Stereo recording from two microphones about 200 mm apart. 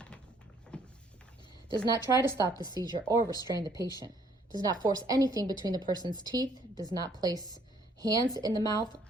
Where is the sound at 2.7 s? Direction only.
20° right (ahead or behind).